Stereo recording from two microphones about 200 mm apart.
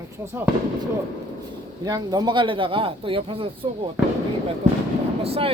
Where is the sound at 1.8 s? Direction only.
20° right (ahead or behind).